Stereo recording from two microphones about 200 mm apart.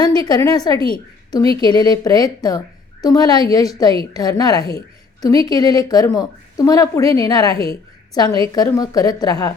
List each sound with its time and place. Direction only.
0.0 s a woman's voice: 20° left (ahead or behind)